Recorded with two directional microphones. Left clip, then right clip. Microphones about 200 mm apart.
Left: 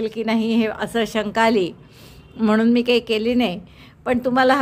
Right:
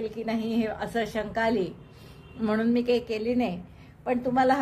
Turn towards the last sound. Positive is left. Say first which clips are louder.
# left 6 dB
turn(degrees=40)  # may be behind; listen again after turning